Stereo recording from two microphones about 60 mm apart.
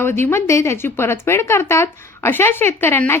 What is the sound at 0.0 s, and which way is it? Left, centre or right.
Speech, left.